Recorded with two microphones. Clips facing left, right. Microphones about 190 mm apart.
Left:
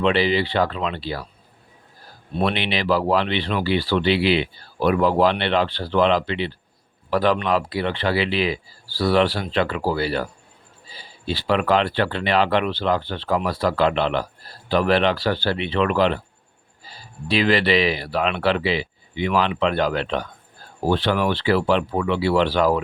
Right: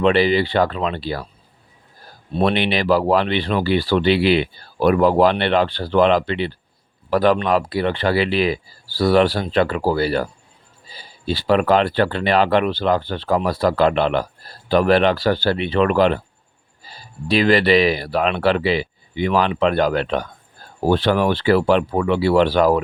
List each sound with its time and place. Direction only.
0.0 s speech: 45° right (ahead or behind)
2.4 s speech: 45° right (ahead or behind)
17.2 s speech: 45° right (ahead or behind)